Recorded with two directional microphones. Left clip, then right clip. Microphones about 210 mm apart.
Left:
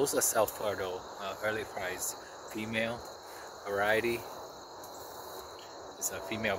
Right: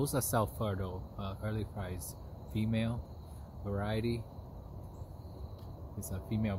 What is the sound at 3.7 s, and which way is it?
Speech, 15° right (ahead or behind).